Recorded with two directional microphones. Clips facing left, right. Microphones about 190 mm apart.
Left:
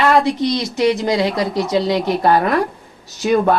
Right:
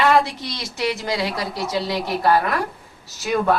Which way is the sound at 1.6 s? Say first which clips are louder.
Left 5 dB; centre (ahead or behind).